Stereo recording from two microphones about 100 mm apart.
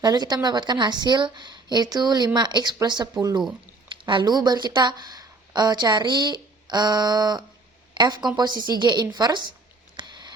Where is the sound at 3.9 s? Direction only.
55° right (ahead or behind).